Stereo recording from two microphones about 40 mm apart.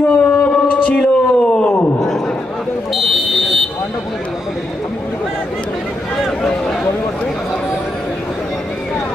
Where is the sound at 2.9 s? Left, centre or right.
Centre.